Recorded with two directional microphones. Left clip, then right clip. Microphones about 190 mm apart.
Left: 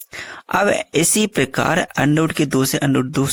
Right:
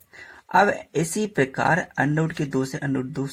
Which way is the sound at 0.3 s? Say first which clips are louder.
Left 2 dB; 45° left (ahead or behind).